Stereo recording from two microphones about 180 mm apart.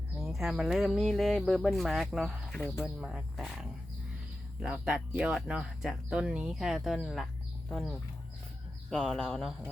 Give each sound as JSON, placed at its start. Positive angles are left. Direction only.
{"t": 0.2, "sound": "speech", "side_deg": 0}
{"t": 2.6, "sound": "speech", "side_deg": 10}
{"t": 3.0, "sound": "speech", "side_deg": 0}